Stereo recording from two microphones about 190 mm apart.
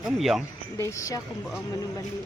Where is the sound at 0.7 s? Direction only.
15° left (ahead or behind).